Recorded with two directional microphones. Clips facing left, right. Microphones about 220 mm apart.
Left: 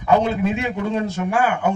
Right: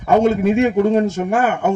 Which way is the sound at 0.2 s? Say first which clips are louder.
Right 7 dB; 45° right (ahead or behind).